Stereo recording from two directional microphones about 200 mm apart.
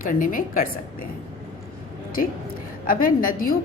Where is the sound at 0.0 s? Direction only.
45° left (ahead or behind).